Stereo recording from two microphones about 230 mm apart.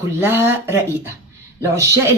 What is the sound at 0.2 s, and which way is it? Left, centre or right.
Speech, centre.